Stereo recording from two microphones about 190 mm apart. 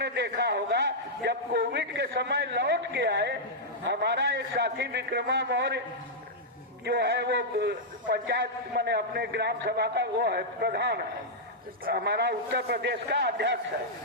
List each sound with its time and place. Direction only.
0.0 s a man's voice: 65° right (ahead or behind)
6.8 s a man's voice: 60° right (ahead or behind)